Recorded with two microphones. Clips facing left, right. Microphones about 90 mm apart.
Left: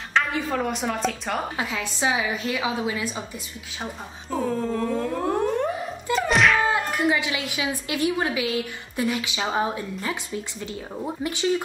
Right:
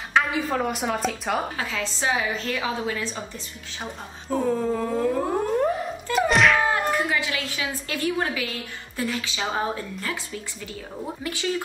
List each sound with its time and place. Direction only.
0.1 s a woman's voice: centre (ahead or behind)
1.6 s a woman's voice: 15° left (ahead or behind)
4.3 s speech: centre (ahead or behind)
6.1 s thunk: centre (ahead or behind)
6.7 s a woman's voice: 20° left (ahead or behind)
10.0 s speech: 25° left (ahead or behind)